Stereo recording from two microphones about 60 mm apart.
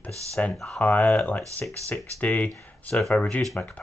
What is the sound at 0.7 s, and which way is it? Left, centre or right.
Speech, left.